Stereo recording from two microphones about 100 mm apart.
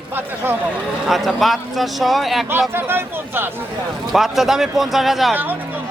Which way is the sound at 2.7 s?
20° right (ahead or behind).